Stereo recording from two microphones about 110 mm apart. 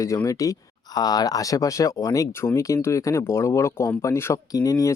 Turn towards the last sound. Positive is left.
turn(degrees=30)  # may be behind; listen again after turning